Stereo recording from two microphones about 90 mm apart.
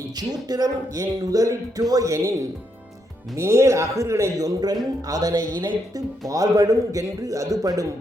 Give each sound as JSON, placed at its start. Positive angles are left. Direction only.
{"t": 0.2, "sound": "speech", "side_deg": -45}